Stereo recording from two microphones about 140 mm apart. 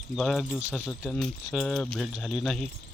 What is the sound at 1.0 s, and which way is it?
Speech, 15° left (ahead or behind).